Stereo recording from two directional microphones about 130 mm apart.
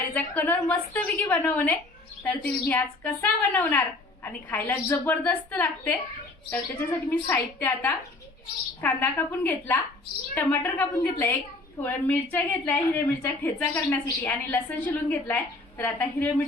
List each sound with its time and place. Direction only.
0.1 s a woman's voice: 15° left (ahead or behind)
7.1 s a woman's voice: 15° left (ahead or behind)